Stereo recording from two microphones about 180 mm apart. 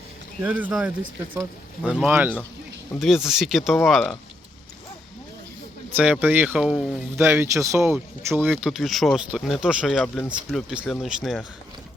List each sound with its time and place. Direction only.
0.4 s speech: 10° right (ahead or behind)
6.0 s speech: 10° right (ahead or behind)
7.2 s speech: 15° right (ahead or behind); by 11.4 s centre (ahead or behind)